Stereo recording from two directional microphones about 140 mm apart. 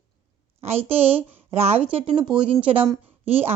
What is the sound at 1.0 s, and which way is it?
Speech, 45° right (ahead or behind).